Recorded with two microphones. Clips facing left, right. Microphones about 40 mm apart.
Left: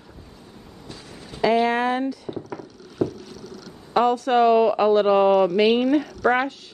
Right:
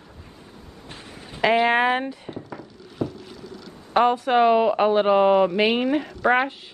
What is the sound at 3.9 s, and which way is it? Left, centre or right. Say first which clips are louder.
Speech: even; right.